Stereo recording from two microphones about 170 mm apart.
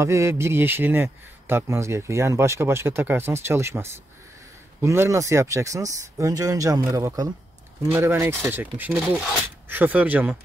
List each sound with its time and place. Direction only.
0.0 s a man's voice: 15° right (ahead or behind)